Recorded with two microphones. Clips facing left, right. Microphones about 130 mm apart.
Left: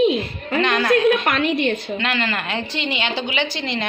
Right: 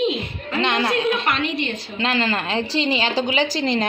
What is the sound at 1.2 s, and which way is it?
Speech, 50° left (ahead or behind).